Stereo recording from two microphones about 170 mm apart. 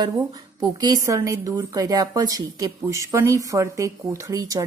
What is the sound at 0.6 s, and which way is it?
A woman's voice, 25° right (ahead or behind).